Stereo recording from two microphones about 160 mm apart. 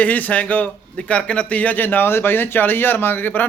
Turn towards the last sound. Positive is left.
turn(degrees=10)  # may be behind; listen again after turning